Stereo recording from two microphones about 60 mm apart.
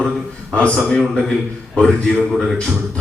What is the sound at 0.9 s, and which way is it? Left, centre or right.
A man's voice, centre.